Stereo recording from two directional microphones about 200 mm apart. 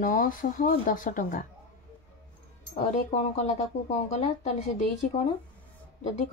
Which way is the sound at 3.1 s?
35° left (ahead or behind).